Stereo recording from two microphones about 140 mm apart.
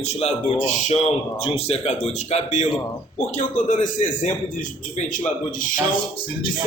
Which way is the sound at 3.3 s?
65° left (ahead or behind).